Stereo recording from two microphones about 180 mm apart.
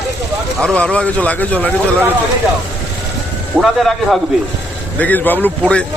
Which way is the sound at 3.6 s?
Centre (ahead or behind).